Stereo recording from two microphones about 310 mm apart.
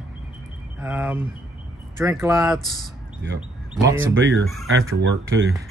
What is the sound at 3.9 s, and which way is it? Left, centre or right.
Speech, right.